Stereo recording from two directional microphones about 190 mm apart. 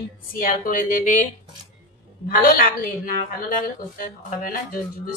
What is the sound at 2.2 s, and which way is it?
A woman's voice, 50° left (ahead or behind).